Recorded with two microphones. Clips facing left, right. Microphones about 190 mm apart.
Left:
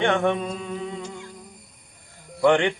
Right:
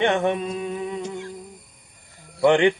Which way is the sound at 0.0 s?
20° right (ahead or behind).